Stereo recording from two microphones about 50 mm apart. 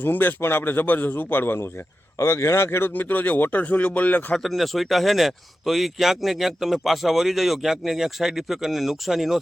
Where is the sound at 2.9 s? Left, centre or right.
Left.